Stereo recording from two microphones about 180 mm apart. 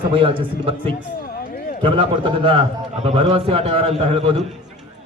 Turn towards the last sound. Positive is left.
turn(degrees=-30)  # may be behind; listen again after turning